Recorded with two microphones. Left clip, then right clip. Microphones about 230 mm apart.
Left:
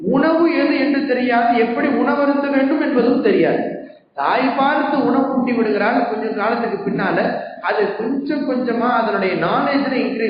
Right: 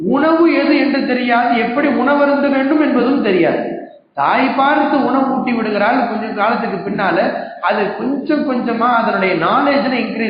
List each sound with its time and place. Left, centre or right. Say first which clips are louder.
0.1 s a sound: right 3 dB; right
4.2 s speech: right 3 dB; right
8.8 s speech: right 5 dB; right